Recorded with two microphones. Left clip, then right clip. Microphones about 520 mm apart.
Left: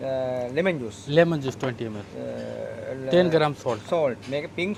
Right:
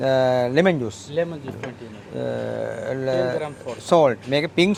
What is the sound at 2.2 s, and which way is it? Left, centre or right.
Speech, right.